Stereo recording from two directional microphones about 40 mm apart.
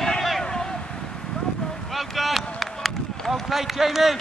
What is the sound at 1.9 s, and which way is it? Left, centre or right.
Run, centre.